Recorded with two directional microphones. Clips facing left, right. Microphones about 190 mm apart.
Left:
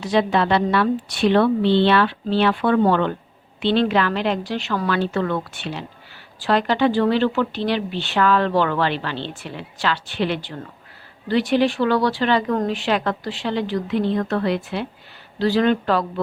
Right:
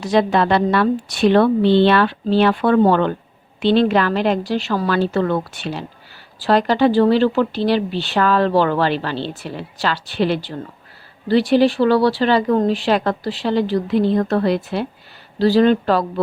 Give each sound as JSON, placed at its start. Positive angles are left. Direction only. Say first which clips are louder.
{"t": 0.0, "sound": "a woman's voice", "louder": "right 3 dB", "side_deg": -45}